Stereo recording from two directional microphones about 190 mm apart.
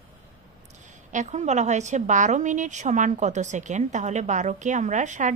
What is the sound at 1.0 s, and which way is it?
A woman's voice, 40° right (ahead or behind).